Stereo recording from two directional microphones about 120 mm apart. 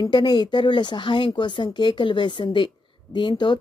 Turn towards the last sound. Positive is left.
turn(degrees=40)  # may be behind; listen again after turning